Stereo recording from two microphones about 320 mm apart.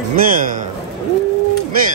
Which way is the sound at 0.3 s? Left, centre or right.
Right.